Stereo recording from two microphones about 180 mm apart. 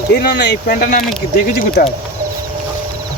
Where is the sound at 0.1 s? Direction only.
70° left (ahead or behind).